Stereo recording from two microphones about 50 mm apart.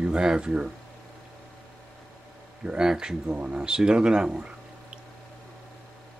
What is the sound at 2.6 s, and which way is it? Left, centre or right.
Speech, centre.